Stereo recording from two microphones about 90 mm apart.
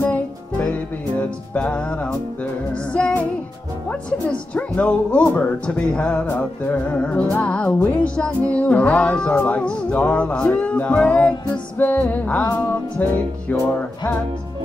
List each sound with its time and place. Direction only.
0.1 s music: 15° left (ahead or behind)
2.7 s speech: 10° left (ahead or behind)
13.0 s music: 20° left (ahead or behind)